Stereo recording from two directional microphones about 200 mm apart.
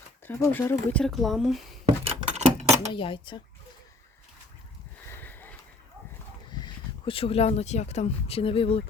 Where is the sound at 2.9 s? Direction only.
25° left (ahead or behind).